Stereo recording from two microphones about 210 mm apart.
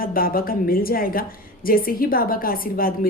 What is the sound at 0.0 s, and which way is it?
A woman's voice, 45° left (ahead or behind).